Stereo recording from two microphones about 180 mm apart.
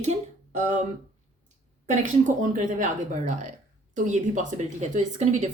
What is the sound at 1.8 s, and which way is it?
A woman's voice, 40° right (ahead or behind).